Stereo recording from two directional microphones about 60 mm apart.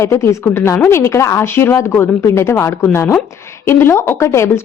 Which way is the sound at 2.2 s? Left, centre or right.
Left.